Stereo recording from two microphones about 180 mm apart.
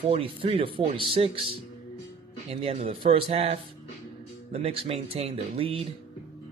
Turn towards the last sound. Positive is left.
turn(degrees=-30)  # may be behind; listen again after turning